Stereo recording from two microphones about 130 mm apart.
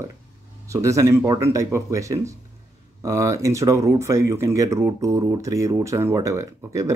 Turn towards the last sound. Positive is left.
turn(degrees=-25)  # may be behind; listen again after turning